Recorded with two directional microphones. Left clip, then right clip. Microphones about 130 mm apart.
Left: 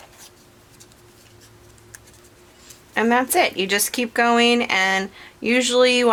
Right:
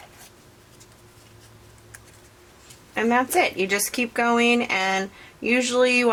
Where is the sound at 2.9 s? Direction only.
40° left (ahead or behind).